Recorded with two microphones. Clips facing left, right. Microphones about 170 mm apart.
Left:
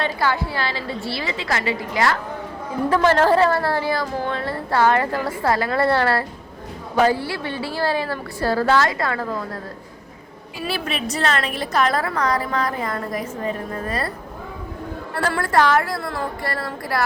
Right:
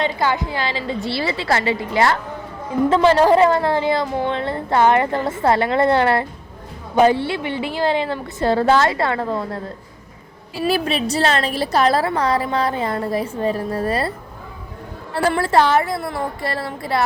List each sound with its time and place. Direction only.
0.0 s a woman's voice: 20° right (ahead or behind)
1.2 s a woman's voice: 35° right (ahead or behind)
2.9 s a woman's voice: 15° right (ahead or behind)
10.6 s a woman's voice: 35° right (ahead or behind)
15.1 s a woman's voice: 25° right (ahead or behind)